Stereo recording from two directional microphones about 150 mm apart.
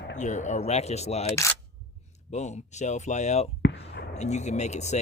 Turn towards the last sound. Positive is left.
turn(degrees=50)  # may be behind; listen again after turning